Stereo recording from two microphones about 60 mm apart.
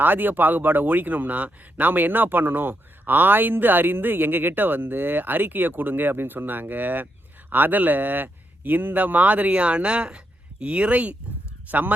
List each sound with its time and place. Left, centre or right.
0.0 s speech: right